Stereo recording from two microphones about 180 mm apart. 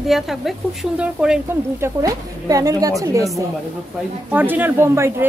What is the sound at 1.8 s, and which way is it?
Speech, 15° right (ahead or behind).